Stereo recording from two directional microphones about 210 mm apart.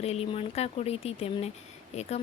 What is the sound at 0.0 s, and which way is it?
A woman's voice, 30° left (ahead or behind).